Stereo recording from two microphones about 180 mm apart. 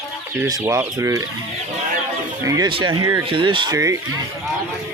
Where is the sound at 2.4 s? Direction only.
25° right (ahead or behind).